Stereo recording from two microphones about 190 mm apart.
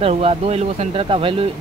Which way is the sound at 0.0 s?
30° right (ahead or behind).